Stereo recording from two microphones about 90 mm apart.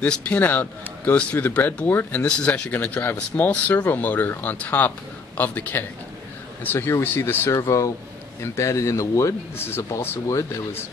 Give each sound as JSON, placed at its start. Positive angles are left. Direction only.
{"t": 0.0, "sound": "speech", "side_deg": 20}
{"t": 2.2, "sound": "speech", "side_deg": 10}